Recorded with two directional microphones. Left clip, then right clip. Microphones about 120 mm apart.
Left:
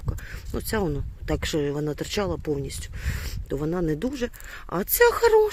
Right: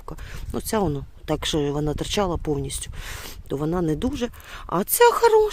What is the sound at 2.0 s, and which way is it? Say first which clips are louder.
Speech: right 3 dB; 25° right (ahead or behind).